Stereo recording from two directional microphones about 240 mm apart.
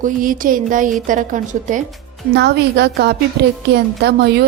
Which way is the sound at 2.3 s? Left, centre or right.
Right.